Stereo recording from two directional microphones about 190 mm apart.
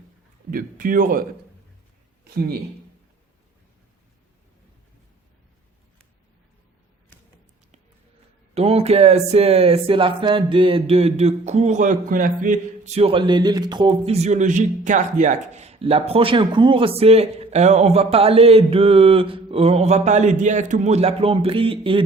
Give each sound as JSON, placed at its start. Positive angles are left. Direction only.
{"t": 0.5, "sound": "speech", "side_deg": -45}
{"t": 8.5, "sound": "speech", "side_deg": -30}